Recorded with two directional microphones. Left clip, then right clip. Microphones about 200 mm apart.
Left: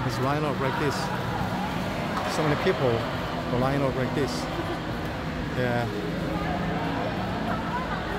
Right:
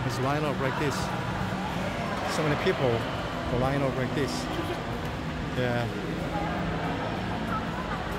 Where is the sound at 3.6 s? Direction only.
Centre (ahead or behind).